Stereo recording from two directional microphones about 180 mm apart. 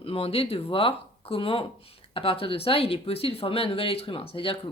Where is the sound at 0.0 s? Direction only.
30° left (ahead or behind).